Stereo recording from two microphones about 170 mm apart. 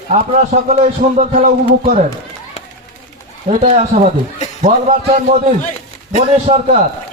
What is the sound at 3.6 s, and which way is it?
Speech, 40° right (ahead or behind).